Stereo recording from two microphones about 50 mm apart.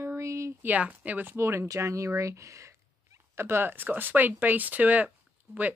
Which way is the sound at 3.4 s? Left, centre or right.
Right.